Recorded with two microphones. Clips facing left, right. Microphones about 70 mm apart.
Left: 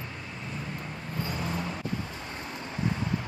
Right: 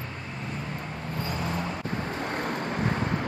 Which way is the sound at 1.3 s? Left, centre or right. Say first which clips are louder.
Right 3 dB; right.